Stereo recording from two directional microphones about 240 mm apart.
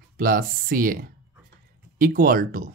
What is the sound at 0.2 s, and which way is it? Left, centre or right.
Speech, right.